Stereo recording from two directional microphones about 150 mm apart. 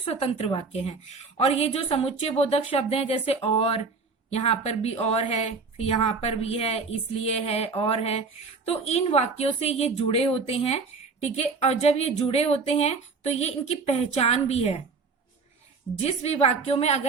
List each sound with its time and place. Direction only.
0.0 s a woman's voice: 45° left (ahead or behind)
16.0 s a woman's voice: 45° left (ahead or behind)